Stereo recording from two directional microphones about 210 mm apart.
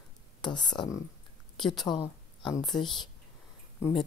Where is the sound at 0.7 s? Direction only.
15° left (ahead or behind).